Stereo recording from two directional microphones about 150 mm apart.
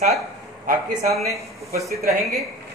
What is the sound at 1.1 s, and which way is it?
Speech, 20° right (ahead or behind).